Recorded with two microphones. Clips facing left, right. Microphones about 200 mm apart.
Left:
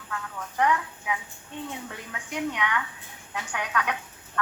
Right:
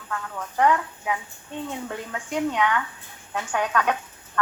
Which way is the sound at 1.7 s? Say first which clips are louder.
Right 6 dB; 50° right (ahead or behind).